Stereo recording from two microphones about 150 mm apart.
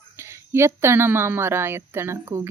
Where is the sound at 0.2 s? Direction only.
15° right (ahead or behind).